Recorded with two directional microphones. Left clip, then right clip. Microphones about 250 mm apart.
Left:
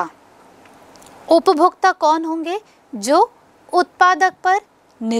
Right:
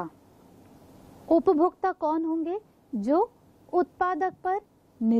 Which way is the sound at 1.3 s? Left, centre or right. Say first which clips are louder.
Left 9 dB; centre.